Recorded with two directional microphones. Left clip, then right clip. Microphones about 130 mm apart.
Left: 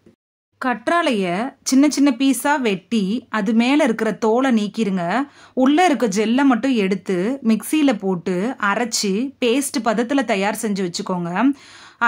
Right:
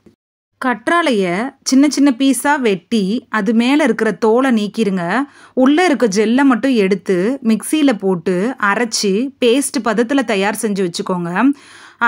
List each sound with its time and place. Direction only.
0.6 s speech: 25° right (ahead or behind)